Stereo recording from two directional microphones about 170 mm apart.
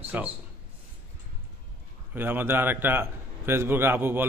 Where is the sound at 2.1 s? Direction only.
10° right (ahead or behind).